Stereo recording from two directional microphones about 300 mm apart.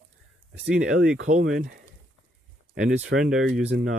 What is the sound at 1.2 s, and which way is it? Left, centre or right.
Speech, right.